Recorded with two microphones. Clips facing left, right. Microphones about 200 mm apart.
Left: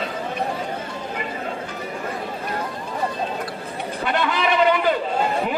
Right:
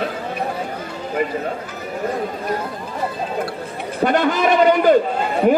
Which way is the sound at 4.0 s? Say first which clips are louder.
Right 6 dB; 45° right (ahead or behind).